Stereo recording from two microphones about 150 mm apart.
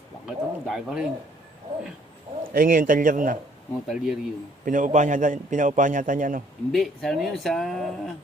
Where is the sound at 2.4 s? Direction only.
70° right (ahead or behind).